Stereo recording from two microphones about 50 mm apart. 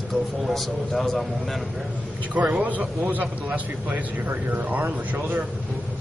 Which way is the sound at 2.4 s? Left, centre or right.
Right.